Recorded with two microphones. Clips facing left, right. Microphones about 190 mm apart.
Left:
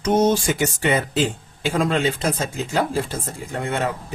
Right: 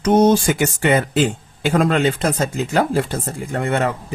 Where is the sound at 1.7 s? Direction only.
60° right (ahead or behind).